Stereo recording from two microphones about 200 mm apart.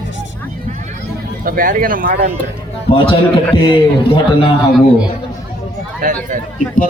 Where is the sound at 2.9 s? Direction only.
25° left (ahead or behind).